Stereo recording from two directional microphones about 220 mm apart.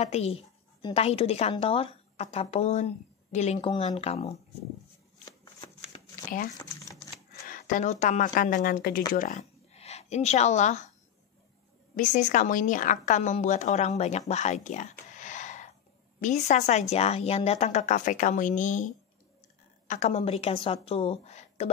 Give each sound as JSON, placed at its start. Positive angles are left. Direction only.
{"t": 0.0, "sound": "a woman's voice", "side_deg": 30}
{"t": 7.4, "sound": "a woman's voice", "side_deg": 40}
{"t": 11.9, "sound": "a woman's voice", "side_deg": 35}
{"t": 19.9, "sound": "a woman's voice", "side_deg": 30}